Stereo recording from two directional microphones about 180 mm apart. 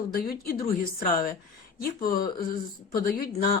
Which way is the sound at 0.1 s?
55° left (ahead or behind).